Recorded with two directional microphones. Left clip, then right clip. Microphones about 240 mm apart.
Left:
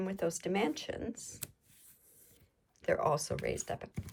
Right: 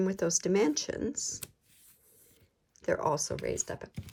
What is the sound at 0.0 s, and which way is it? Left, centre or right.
Speech, right.